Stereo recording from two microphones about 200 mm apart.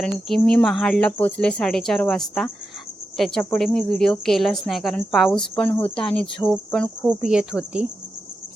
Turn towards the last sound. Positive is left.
turn(degrees=-5)  # may be behind; listen again after turning